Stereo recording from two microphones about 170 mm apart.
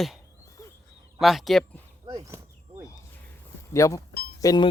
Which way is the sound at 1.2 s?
Centre (ahead or behind).